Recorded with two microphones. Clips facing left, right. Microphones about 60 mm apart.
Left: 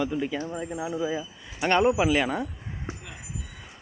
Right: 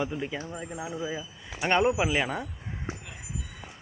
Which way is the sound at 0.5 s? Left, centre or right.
Centre.